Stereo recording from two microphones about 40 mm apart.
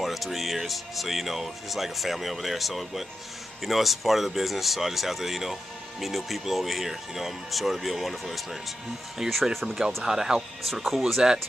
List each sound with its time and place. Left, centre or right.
0.0 s speech: centre
10.0 s speech: centre
10.6 s speech: centre
11.2 s speech: centre